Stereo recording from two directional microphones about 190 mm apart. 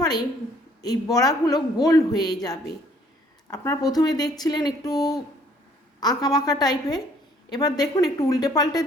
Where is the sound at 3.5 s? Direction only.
15° left (ahead or behind).